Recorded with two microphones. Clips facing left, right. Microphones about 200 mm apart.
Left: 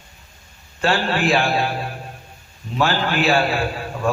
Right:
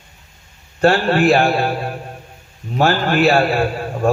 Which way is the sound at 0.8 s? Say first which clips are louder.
Right 6 dB; 45° right (ahead or behind).